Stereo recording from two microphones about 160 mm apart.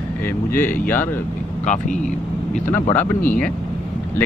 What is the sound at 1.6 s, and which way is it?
Speech, 50° left (ahead or behind).